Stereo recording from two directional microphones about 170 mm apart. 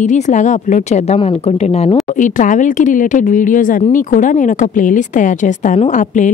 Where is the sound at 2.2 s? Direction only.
50° left (ahead or behind).